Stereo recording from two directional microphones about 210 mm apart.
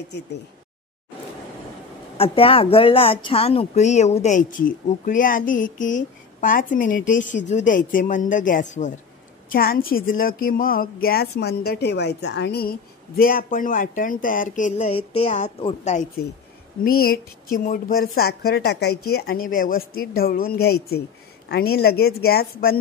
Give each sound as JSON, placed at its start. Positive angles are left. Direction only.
{"t": 2.1, "sound": "speech", "side_deg": 25}
{"t": 16.8, "sound": "speech", "side_deg": 45}